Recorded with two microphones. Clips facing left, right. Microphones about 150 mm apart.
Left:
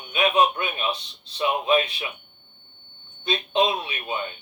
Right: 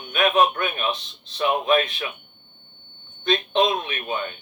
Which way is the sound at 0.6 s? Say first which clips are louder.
Right 2 dB; 40° right (ahead or behind).